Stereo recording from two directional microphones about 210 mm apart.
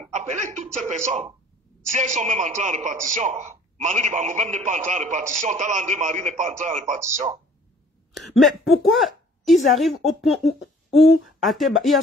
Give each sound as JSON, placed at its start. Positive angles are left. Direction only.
{"t": 0.0, "sound": "a sound", "side_deg": -35}
{"t": 0.7, "sound": "a man's voice", "side_deg": -35}
{"t": 8.2, "sound": "speech", "side_deg": 0}